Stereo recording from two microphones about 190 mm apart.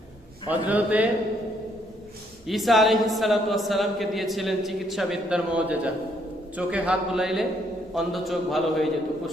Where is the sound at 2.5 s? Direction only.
Centre (ahead or behind).